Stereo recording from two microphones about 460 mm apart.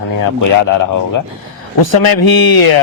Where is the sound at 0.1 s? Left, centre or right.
Left.